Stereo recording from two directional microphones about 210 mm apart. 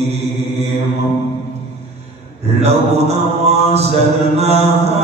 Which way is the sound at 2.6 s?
30° right (ahead or behind).